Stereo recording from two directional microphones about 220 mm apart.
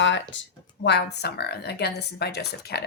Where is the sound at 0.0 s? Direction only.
55° left (ahead or behind).